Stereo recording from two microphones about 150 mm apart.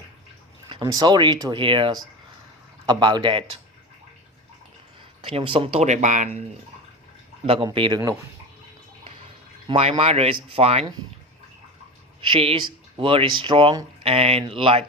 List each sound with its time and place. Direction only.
0.7 s speech: 25° right (ahead or behind)
5.2 s speech: 35° right (ahead or behind); by 6.4 s 50° right (ahead or behind)
7.4 s speech: 35° right (ahead or behind)
9.6 s speech: 40° right (ahead or behind)
12.2 s speech: 35° right (ahead or behind)